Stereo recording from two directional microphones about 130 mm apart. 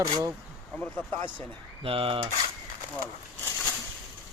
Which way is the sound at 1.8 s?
45° right (ahead or behind).